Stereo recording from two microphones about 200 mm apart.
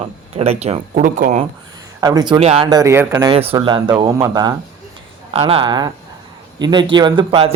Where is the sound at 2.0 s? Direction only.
20° right (ahead or behind).